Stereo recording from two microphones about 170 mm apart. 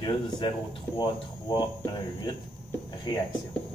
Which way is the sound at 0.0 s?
30° left (ahead or behind).